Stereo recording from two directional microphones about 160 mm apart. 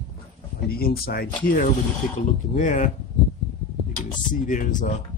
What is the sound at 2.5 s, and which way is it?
Speech, 55° left (ahead or behind).